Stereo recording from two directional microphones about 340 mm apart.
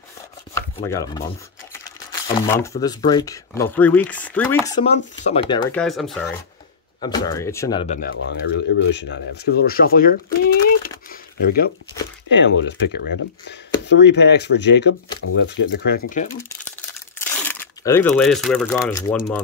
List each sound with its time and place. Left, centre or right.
0.6 s speech: centre
2.2 s speech: centre
4.6 s speech: centre
8.1 s speech: left
11.1 s a sound: left
12.3 s speech: left
17.2 s speech: centre